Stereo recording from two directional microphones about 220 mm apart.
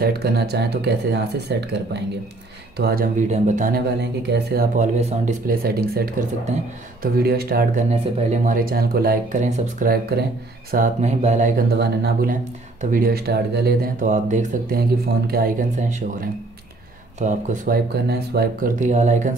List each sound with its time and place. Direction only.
0.0 s speech: 45° right (ahead or behind)
4.0 s speech: 50° right (ahead or behind)
7.9 s speech: 35° right (ahead or behind)
18.0 s speech: 45° right (ahead or behind)